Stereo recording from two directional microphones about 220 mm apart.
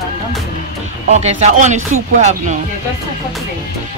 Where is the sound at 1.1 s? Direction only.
30° right (ahead or behind).